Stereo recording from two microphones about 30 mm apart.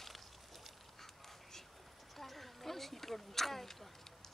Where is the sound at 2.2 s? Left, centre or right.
Centre.